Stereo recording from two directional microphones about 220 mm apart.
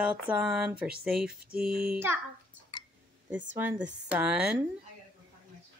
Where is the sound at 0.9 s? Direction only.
45° right (ahead or behind).